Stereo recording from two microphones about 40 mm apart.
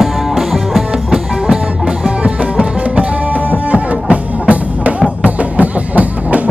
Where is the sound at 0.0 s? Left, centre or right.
Centre.